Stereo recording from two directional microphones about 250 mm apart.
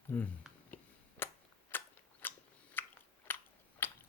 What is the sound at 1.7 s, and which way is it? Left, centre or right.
Biting, centre.